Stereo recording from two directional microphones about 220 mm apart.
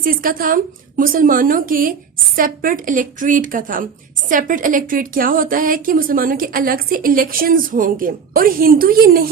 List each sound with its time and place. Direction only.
0.0 s a woman's voice: 40° right (ahead or behind)